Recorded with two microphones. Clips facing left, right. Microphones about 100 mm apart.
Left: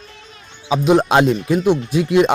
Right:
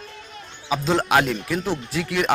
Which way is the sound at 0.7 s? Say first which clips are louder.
Left 6 dB; 20° left (ahead or behind).